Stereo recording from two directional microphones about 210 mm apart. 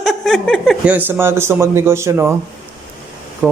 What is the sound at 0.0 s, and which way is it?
Speech, centre (ahead or behind).